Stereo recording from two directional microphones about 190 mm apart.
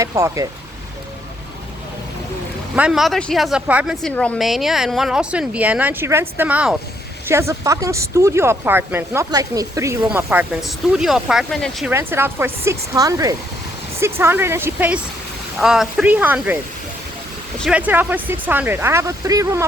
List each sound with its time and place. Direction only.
0.0 s speech: 15° right (ahead or behind)
2.7 s speech: 5° right (ahead or behind)
4.0 s speech: 5° left (ahead or behind)
11.9 s speech: 10° right (ahead or behind)
17.6 s speech: 5° right (ahead or behind)